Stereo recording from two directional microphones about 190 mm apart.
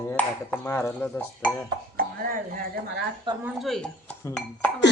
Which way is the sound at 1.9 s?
50° right (ahead or behind).